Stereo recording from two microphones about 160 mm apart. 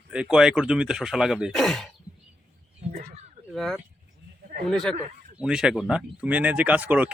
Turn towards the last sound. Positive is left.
turn(degrees=-10)  # may be behind; listen again after turning